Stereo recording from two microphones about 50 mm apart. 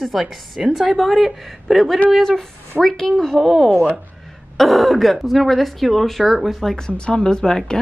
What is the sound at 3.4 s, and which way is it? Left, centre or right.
A woman's voice, centre.